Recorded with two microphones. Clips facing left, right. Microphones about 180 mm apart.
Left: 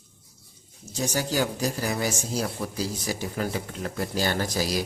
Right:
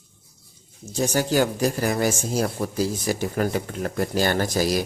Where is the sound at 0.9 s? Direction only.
55° right (ahead or behind).